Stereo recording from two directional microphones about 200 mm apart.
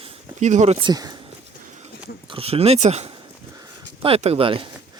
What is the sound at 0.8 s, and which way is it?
Speech, 20° right (ahead or behind).